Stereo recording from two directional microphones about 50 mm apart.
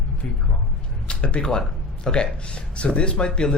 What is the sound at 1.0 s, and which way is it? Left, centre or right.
Speech, left.